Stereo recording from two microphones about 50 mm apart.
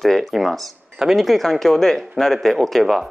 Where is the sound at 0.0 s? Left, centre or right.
Centre.